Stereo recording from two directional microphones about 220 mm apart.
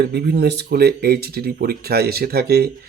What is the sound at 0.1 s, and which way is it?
Speech, 45° right (ahead or behind).